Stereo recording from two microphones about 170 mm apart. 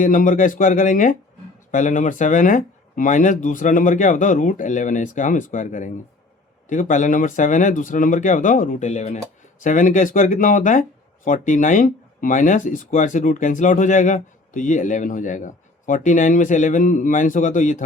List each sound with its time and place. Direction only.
0.0 s speech: 50° left (ahead or behind)